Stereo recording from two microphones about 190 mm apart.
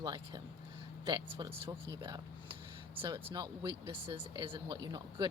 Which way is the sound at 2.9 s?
25° right (ahead or behind).